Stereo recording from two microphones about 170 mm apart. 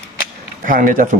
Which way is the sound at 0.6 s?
50° right (ahead or behind).